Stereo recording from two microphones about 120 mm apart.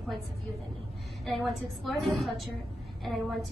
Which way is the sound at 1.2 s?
Centre (ahead or behind).